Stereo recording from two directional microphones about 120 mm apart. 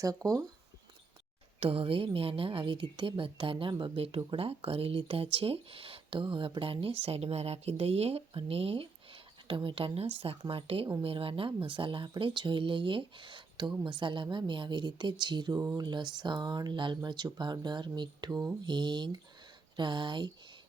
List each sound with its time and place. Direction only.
0.0 s speech: 30° right (ahead or behind)
1.5 s speech: 50° right (ahead or behind)